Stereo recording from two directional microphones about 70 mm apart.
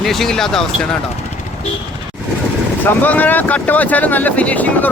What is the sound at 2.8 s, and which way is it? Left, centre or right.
Speech, left.